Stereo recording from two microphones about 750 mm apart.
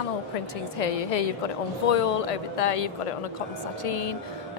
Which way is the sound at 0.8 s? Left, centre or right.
Left.